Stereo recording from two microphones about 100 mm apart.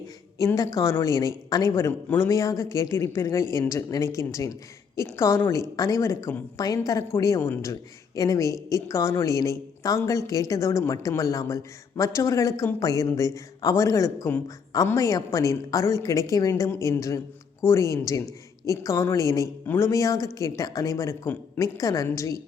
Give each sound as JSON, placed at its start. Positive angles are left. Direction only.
{"t": 0.3, "sound": "a woman's voice", "side_deg": 35}